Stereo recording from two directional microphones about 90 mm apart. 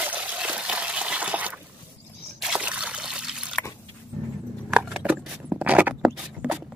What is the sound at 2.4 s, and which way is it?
Trickle, 10° right (ahead or behind).